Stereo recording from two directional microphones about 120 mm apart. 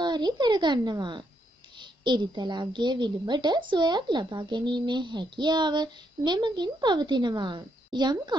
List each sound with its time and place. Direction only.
0.0 s a child's voice: 35° right (ahead or behind)